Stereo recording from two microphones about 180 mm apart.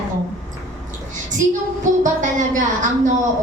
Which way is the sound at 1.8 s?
45° right (ahead or behind).